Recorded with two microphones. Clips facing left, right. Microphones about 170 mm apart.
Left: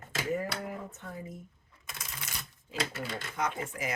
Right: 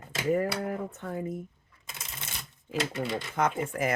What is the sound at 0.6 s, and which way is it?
Speech, 60° right (ahead or behind).